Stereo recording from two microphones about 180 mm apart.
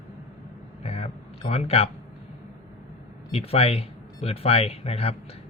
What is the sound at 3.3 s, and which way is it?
A man's voice, 35° left (ahead or behind).